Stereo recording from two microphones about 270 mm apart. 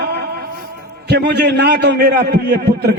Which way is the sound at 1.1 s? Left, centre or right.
Right.